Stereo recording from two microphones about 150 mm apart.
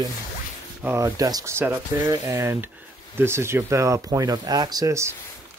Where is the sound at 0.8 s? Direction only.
20° right (ahead or behind).